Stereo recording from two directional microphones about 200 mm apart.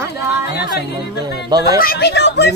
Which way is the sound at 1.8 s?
50° left (ahead or behind).